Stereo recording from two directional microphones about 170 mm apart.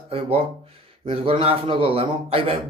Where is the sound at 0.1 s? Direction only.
35° right (ahead or behind).